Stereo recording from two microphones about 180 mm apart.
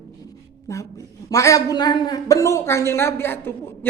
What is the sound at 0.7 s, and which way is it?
A woman's voice, 20° left (ahead or behind).